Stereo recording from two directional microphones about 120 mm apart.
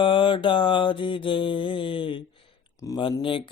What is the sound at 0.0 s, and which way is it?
Mantra, 45° left (ahead or behind).